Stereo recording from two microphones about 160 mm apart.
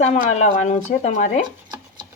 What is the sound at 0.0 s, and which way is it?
Speech, 45° left (ahead or behind).